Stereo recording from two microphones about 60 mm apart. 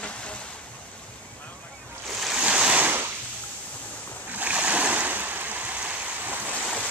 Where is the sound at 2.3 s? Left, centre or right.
Centre.